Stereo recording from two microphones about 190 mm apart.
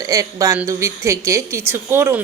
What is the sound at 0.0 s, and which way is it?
A woman's voice, 15° right (ahead or behind).